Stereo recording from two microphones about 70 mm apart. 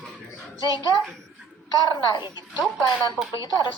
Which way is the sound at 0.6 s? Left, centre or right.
Left.